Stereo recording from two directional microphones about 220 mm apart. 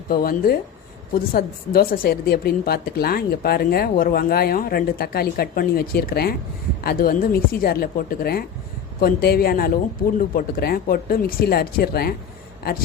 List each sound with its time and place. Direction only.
0.1 s a woman's voice: 40° left (ahead or behind)